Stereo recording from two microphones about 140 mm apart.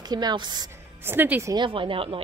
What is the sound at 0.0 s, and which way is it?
Speech, 30° right (ahead or behind).